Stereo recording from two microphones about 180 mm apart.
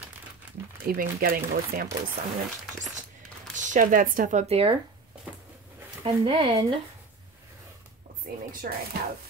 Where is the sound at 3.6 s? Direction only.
45° right (ahead or behind).